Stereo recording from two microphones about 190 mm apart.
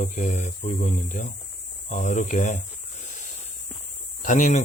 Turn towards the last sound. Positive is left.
turn(degrees=40)  # may be behind; listen again after turning